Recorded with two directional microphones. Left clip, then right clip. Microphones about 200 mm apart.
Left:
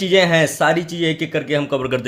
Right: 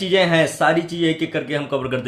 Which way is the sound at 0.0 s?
40° left (ahead or behind).